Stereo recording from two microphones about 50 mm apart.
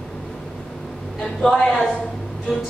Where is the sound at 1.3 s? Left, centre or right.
Centre.